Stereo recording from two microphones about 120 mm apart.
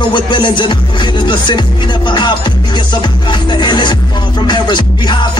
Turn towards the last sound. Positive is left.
turn(degrees=40)  # may be behind; listen again after turning